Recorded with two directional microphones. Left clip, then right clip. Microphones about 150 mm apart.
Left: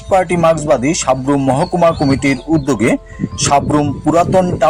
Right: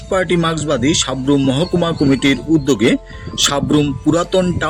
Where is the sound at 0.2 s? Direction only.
5° right (ahead or behind).